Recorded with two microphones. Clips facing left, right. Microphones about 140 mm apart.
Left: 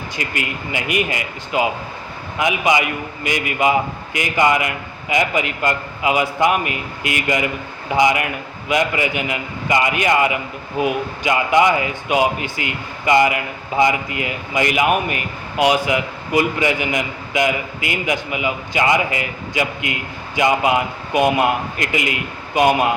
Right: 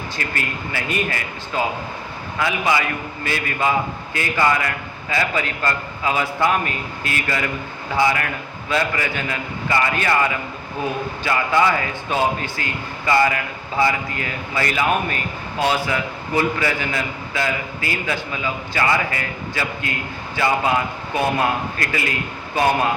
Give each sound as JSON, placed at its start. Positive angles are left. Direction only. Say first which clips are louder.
{"t": 0.2, "sound": "a man's voice", "louder": "left 2 dB", "side_deg": 15}